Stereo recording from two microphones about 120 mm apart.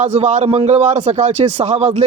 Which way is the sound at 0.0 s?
70° right (ahead or behind).